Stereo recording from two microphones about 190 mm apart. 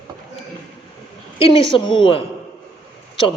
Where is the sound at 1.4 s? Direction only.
30° left (ahead or behind).